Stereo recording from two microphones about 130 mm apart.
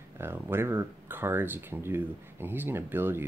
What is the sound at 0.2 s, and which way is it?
Speech, 15° right (ahead or behind).